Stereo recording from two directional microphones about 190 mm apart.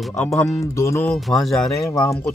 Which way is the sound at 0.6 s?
15° left (ahead or behind).